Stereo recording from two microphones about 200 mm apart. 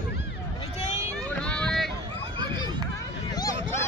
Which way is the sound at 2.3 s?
20° right (ahead or behind).